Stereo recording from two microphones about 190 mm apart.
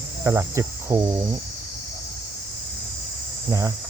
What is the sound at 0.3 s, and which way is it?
Cricket, 15° right (ahead or behind).